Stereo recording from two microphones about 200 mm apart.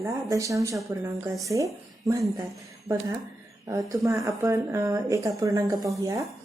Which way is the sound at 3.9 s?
15° right (ahead or behind).